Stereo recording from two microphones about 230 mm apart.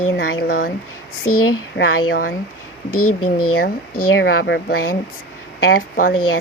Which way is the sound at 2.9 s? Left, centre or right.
Left.